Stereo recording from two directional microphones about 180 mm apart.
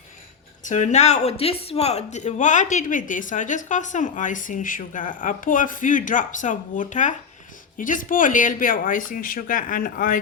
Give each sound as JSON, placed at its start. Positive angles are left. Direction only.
{"t": 0.6, "sound": "speech", "side_deg": 40}